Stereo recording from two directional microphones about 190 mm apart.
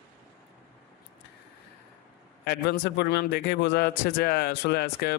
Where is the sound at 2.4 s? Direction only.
60° left (ahead or behind).